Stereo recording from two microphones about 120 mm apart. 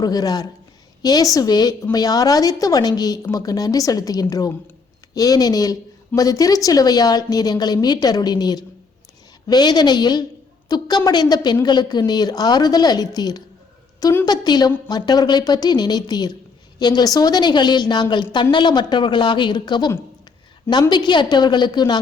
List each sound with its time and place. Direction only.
0.0 s a woman's voice: 30° left (ahead or behind)
14.0 s a woman's voice: 20° left (ahead or behind)
14.3 s a woman's voice: 35° left (ahead or behind)
20.9 s a woman's voice: 40° left (ahead or behind)